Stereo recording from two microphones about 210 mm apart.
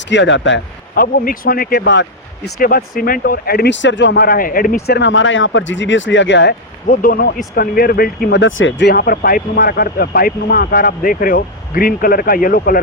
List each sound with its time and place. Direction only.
0.0 s speech: 60° left (ahead or behind)
0.9 s speech: 45° left (ahead or behind); by 6.6 s 60° left (ahead or behind)
6.8 s speech: 40° left (ahead or behind)